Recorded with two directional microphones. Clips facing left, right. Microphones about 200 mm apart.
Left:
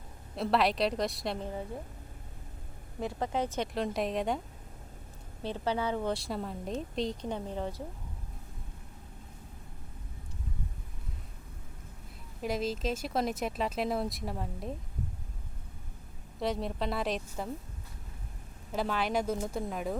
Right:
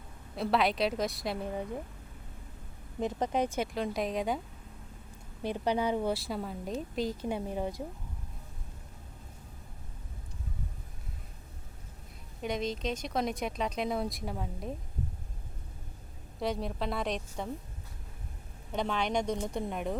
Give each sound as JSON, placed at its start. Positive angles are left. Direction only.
{"t": 0.3, "sound": "speech", "side_deg": 0}
{"t": 3.0, "sound": "speech", "side_deg": -20}
{"t": 3.7, "sound": "speech", "side_deg": 0}
{"t": 5.4, "sound": "speech", "side_deg": -15}
{"t": 12.4, "sound": "speech", "side_deg": 5}
{"t": 16.4, "sound": "speech", "side_deg": 0}
{"t": 18.7, "sound": "speech", "side_deg": 5}